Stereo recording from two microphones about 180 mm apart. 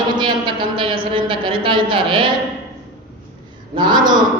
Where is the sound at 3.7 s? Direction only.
25° right (ahead or behind).